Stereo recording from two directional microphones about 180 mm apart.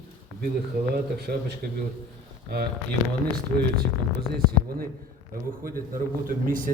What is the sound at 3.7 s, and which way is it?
A man's voice, 60° right (ahead or behind).